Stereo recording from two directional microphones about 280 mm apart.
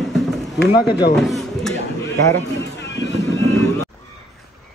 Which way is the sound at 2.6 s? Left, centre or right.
Left.